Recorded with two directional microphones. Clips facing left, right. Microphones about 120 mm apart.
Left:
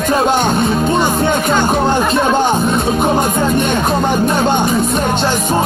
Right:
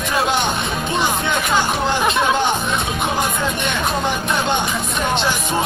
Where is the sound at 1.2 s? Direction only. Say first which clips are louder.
Left 6 dB; 40° left (ahead or behind).